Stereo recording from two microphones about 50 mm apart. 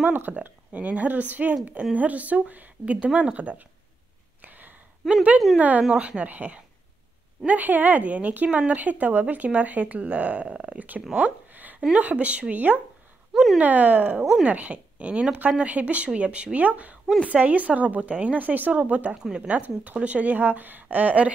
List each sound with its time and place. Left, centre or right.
0.0 s speech: right
0.3 s speech: right
4.5 s a sound: right
5.0 s speech: centre
5.6 s speech: right
11.1 s a sound: right
11.9 s speech: right
13.3 s speech: centre
13.6 s speech: right
19.1 s speech: centre
19.4 s speech: right